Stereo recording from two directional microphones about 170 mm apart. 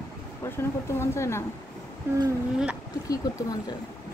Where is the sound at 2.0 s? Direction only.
15° right (ahead or behind).